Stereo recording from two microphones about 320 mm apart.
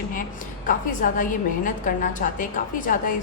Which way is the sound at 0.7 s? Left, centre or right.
Left.